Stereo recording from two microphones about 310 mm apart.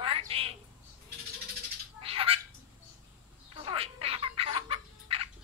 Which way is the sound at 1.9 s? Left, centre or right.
Centre.